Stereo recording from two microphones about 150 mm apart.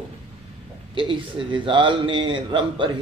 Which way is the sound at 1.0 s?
35° right (ahead or behind).